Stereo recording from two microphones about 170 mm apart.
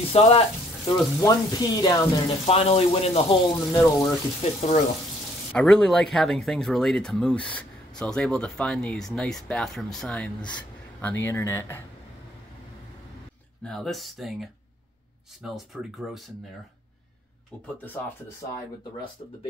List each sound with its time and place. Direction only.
0.1 s speech: 35° left (ahead or behind)
0.9 s speech: 20° left (ahead or behind)
2.4 s speech: 35° left (ahead or behind)
3.5 s speech: 15° left (ahead or behind)
4.4 s speech: 40° left (ahead or behind)
5.5 s speech: 5° left (ahead or behind)
13.7 s speech: centre (ahead or behind)